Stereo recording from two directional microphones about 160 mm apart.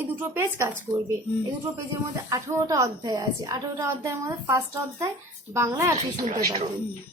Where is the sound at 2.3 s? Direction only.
20° right (ahead or behind).